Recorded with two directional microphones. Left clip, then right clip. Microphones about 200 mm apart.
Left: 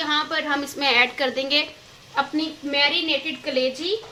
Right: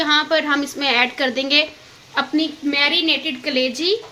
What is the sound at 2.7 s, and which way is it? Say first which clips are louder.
A woman's voice: right 3 dB; 55° right (ahead or behind).